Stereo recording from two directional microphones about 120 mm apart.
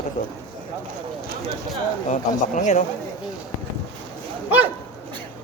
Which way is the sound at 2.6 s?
90° left.